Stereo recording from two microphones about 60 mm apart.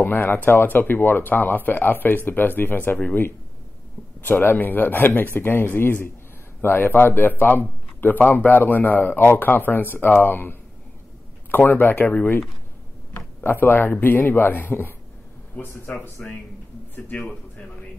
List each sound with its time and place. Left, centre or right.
0.0 s a man's voice: left
11.5 s a man's voice: left
16.2 s a man's voice: centre